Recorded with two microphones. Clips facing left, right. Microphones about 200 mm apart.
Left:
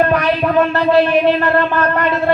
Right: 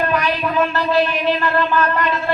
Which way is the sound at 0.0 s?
60° left (ahead or behind).